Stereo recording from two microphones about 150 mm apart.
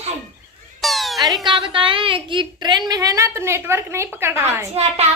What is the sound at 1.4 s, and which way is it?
A woman's voice, 35° right (ahead or behind).